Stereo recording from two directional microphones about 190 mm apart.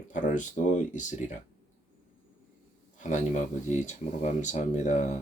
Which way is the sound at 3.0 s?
40° left (ahead or behind).